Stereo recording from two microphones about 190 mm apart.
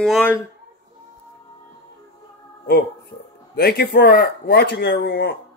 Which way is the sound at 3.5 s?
60° left (ahead or behind).